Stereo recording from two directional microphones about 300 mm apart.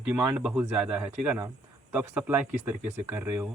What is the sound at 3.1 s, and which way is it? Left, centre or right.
Speech, centre.